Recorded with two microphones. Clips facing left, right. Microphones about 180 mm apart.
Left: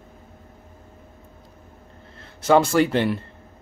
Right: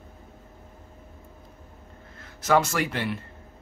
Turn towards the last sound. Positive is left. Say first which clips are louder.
# left 9 dB
turn(degrees=30)  # may be behind; listen again after turning